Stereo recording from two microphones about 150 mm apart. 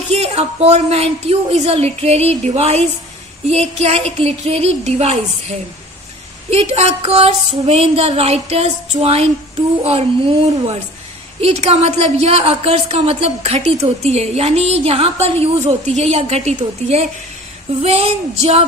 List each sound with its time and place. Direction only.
0.1 s a woman's voice: 45° right (ahead or behind)
6.5 s a woman's voice: 45° right (ahead or behind)
11.4 s a woman's voice: 45° right (ahead or behind)